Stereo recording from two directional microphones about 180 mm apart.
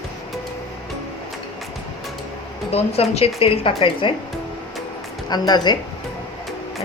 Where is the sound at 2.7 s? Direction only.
35° left (ahead or behind).